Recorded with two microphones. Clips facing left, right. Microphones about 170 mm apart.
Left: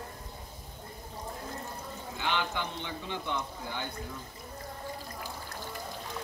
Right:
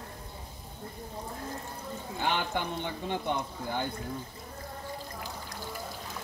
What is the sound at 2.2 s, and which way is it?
Speech, 45° right (ahead or behind).